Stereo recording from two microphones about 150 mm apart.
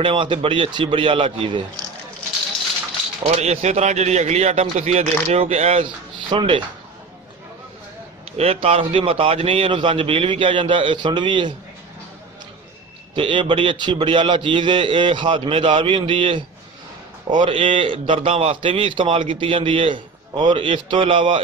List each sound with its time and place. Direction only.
0.0 s a man's voice: 35° right (ahead or behind)
3.3 s speech: 45° right (ahead or behind)
6.3 s a man's voice: 35° right (ahead or behind)
8.4 s a man's voice: 45° right (ahead or behind)
13.1 s a man's voice: 35° right (ahead or behind)